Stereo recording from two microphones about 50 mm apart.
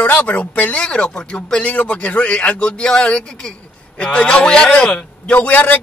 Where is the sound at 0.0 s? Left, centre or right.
Left.